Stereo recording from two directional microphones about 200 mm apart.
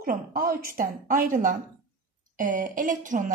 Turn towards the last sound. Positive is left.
turn(degrees=-40)  # may be behind; listen again after turning